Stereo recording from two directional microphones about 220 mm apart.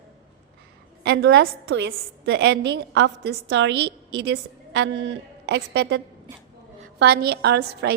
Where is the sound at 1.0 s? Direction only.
50° right (ahead or behind).